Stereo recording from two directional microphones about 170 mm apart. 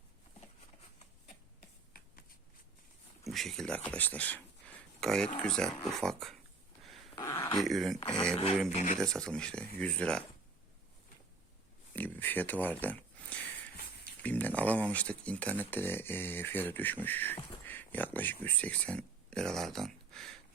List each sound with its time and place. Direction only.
3.2 s speech: centre (ahead or behind)
7.2 s a sound: 20° left (ahead or behind)
7.6 s speech: centre (ahead or behind)
8.7 s speech: 45° left (ahead or behind)
9.0 s speech: 5° left (ahead or behind)
11.9 s speech: 10° left (ahead or behind)